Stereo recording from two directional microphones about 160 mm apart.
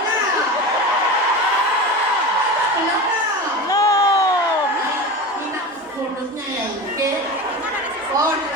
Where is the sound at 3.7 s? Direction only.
20° left (ahead or behind).